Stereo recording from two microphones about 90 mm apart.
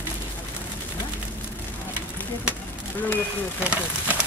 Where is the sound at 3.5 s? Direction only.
15° right (ahead or behind).